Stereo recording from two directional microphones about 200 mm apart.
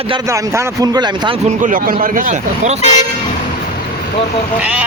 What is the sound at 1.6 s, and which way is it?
A man's voice, 40° right (ahead or behind).